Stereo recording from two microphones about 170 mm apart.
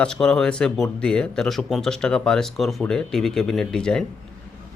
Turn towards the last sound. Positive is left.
turn(degrees=5)  # may be behind; listen again after turning